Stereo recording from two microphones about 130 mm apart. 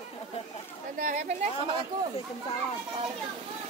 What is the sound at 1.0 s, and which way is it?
Music, 70° right (ahead or behind).